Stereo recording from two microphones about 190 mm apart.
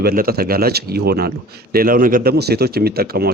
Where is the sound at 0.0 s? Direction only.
50° right (ahead or behind).